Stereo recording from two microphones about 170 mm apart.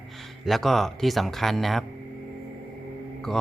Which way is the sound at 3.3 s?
5° left (ahead or behind).